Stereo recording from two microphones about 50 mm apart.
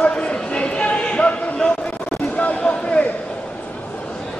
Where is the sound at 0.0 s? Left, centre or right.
Left.